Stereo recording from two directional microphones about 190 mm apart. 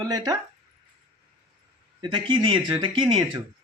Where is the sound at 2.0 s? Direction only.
25° right (ahead or behind).